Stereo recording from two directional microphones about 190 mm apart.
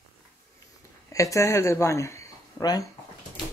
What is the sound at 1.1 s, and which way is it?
Speech, 15° left (ahead or behind).